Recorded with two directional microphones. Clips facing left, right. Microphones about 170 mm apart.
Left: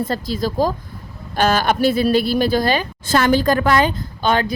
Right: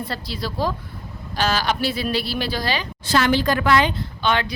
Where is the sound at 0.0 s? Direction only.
45° left (ahead or behind).